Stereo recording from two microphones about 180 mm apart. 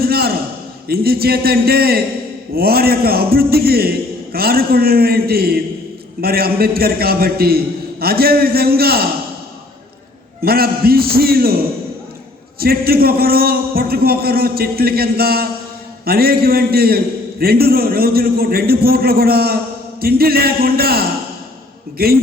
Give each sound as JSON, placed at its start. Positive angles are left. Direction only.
{"t": 0.0, "sound": "a sound", "side_deg": -55}
{"t": 0.9, "sound": "a man's voice", "side_deg": -60}
{"t": 10.4, "sound": "a man's voice", "side_deg": -55}
{"t": 12.5, "sound": "a man's voice", "side_deg": -55}